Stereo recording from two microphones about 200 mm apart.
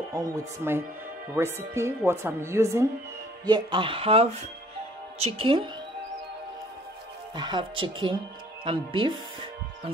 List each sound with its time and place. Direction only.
0.1 s speech: 15° right (ahead or behind)
7.3 s speech: 20° right (ahead or behind)